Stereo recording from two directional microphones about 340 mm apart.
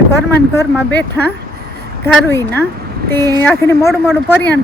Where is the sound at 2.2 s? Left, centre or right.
Centre.